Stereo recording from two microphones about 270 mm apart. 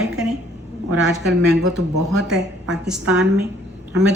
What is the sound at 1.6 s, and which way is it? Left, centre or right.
Speech, right.